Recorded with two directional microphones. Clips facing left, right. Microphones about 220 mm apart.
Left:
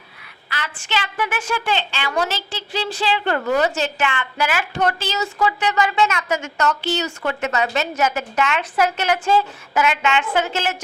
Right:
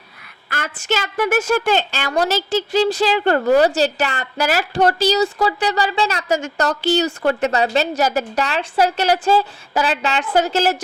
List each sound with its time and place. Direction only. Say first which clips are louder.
0.5 s a woman's voice: right 4 dB; 45° right (ahead or behind)